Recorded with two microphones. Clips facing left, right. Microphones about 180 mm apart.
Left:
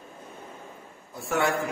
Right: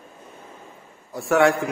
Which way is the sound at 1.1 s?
80° right.